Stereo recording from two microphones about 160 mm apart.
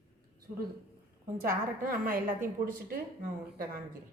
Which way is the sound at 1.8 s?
60° right (ahead or behind).